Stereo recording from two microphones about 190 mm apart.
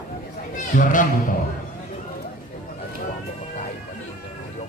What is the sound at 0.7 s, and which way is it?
Speech, 45° left (ahead or behind).